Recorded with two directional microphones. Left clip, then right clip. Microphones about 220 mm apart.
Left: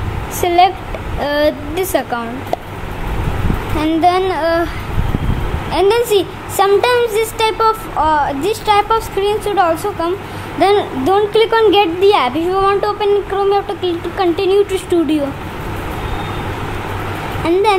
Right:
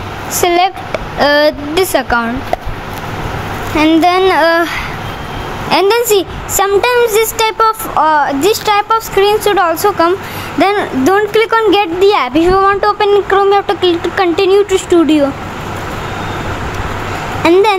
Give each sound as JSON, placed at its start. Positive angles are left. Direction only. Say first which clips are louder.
{"t": 0.4, "sound": "speech", "louder": "even", "side_deg": -15}
{"t": 3.7, "sound": "speech", "louder": "right 4 dB", "side_deg": -20}
{"t": 5.7, "sound": "speech", "louder": "right 3 dB", "side_deg": -20}
{"t": 17.4, "sound": "speech", "louder": "right 5 dB", "side_deg": -20}